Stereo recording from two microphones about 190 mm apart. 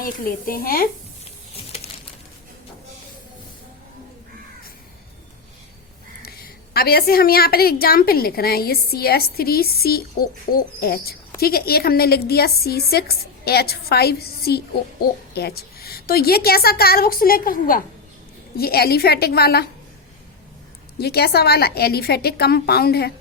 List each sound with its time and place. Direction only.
0.0 s a woman's voice: 50° left (ahead or behind)
1.5 s a sound: 30° left (ahead or behind)
6.2 s a woman's voice: 55° left (ahead or behind)
21.0 s a woman's voice: 55° left (ahead or behind)